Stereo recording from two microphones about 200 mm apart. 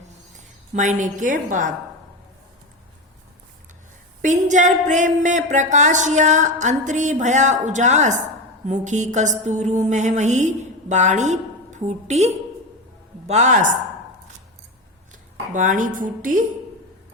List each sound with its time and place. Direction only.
0.7 s speech: 40° right (ahead or behind)
4.2 s speech: 40° right (ahead or behind)
15.1 s speech: 40° right (ahead or behind)